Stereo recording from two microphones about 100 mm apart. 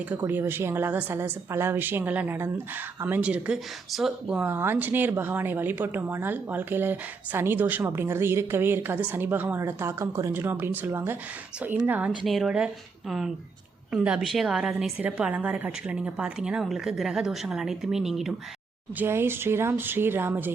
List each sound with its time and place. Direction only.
0.3 s a woman's voice: 20° right (ahead or behind); by 4.4 s 5° right (ahead or behind)
4.4 s a woman's voice: 20° right (ahead or behind)
12.2 s a woman's voice: centre (ahead or behind)
18.9 s speech: 25° right (ahead or behind)